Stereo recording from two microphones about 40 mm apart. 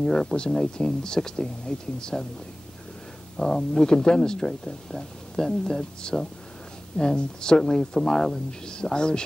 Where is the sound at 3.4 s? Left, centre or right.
Centre.